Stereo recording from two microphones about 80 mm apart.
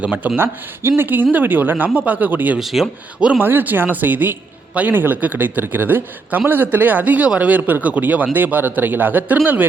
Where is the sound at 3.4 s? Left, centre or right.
Right.